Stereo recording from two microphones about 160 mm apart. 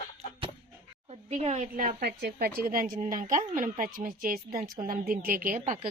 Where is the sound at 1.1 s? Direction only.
45° right (ahead or behind).